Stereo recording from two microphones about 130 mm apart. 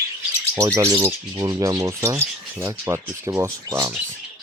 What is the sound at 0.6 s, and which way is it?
Speech, 25° right (ahead or behind).